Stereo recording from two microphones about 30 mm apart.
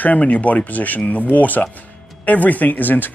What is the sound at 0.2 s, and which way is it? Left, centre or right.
Speech, left.